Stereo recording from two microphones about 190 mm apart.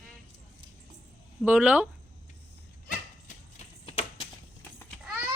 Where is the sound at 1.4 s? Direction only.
5° right (ahead or behind).